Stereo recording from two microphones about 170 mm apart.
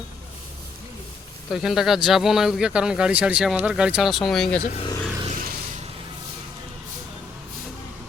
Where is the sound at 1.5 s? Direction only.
Centre (ahead or behind).